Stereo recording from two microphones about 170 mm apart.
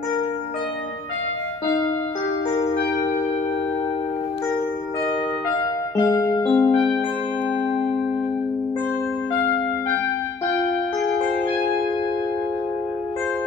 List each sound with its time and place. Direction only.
5.9 s music: 20° left (ahead or behind)